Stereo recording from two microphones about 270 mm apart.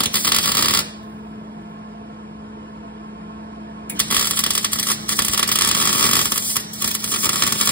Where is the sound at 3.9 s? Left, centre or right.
Centre.